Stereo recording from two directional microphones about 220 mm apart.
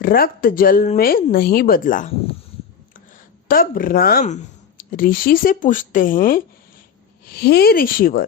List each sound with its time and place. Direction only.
0.0 s speech: 40° left (ahead or behind)
3.5 s speech: 40° left (ahead or behind)